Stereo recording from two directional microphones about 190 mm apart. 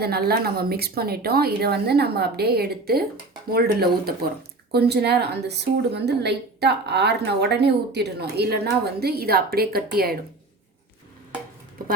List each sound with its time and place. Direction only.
0.0 s a woman's voice: 55° right (ahead or behind)